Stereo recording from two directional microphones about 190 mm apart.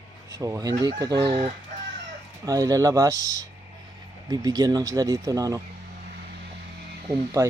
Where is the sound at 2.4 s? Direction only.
20° right (ahead or behind).